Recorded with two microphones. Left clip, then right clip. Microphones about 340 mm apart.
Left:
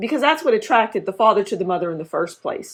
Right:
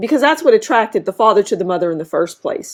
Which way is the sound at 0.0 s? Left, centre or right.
Right.